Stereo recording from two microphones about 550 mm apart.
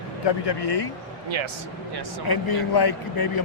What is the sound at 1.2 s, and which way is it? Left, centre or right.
Speech, right.